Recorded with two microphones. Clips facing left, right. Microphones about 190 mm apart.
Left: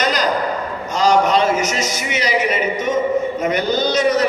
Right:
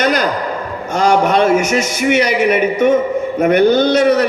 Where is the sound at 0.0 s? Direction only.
55° right (ahead or behind).